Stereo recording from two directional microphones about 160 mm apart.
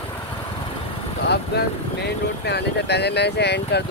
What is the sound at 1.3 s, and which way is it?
Vehicle, 90° left.